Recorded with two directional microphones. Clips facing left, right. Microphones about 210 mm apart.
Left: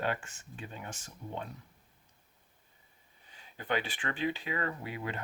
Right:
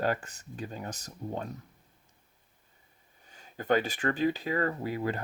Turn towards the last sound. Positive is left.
turn(degrees=-40)  # may be behind; listen again after turning